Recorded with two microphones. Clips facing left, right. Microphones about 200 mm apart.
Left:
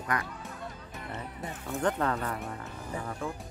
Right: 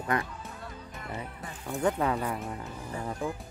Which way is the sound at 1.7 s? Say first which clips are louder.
Right 2 dB; 10° right (ahead or behind).